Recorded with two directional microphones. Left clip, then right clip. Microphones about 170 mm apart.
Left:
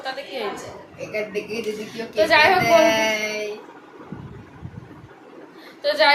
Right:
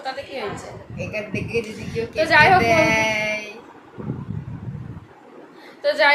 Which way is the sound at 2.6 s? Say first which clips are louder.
Left 1 dB; 35° right (ahead or behind).